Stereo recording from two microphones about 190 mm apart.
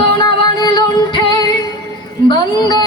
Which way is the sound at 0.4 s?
20° left (ahead or behind).